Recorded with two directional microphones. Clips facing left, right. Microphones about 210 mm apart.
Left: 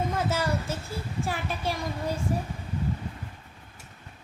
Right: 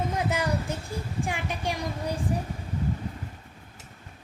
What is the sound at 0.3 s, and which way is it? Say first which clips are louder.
Child singing: even; 15° right (ahead or behind).